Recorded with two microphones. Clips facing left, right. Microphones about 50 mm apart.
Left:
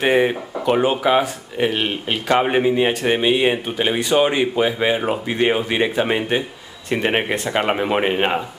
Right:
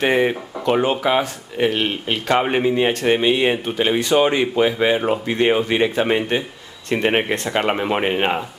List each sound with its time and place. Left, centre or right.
0.0 s speech: centre